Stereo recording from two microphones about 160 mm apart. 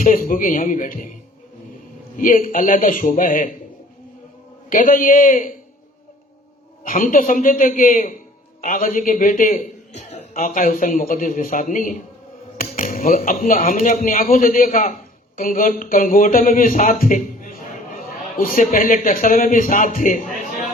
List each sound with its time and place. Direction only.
0.0 s speech: 55° left (ahead or behind)
2.1 s speech: 55° left (ahead or behind)
4.7 s speech: 60° left (ahead or behind)
6.8 s speech: 60° left (ahead or behind)
9.6 s a man's voice: 45° left (ahead or behind)